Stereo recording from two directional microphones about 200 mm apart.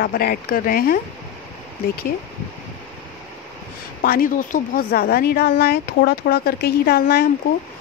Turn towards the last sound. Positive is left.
turn(degrees=50)  # may be behind; listen again after turning